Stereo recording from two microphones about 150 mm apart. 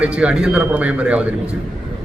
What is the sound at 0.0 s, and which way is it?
A man's voice, 10° right (ahead or behind).